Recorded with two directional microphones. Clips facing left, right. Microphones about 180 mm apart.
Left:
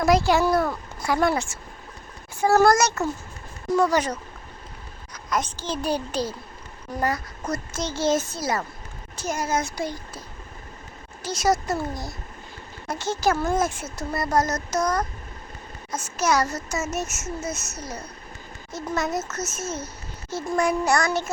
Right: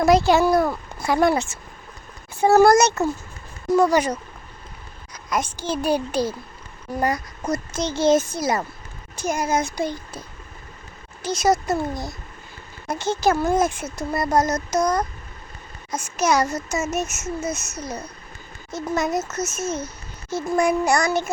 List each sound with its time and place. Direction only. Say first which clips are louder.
0.0 s speech: right 3 dB; 25° right (ahead or behind)
0.4 s speech: right 3 dB; 10° right (ahead or behind)
11.2 s speech: right 3 dB; 20° right (ahead or behind)